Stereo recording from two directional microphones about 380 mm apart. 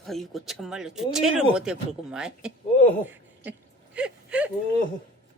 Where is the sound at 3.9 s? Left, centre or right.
Centre.